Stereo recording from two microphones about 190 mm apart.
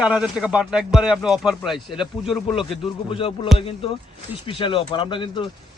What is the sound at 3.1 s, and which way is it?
Speech, 30° left (ahead or behind).